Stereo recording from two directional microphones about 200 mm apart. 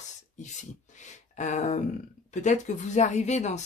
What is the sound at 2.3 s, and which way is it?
Speech, 35° left (ahead or behind).